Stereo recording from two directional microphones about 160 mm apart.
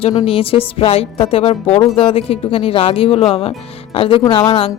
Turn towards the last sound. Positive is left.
turn(degrees=35)  # may be behind; listen again after turning